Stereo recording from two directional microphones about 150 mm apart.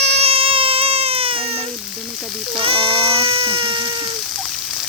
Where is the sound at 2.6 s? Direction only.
35° right (ahead or behind).